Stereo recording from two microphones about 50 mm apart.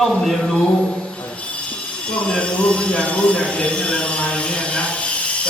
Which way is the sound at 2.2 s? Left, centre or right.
Left.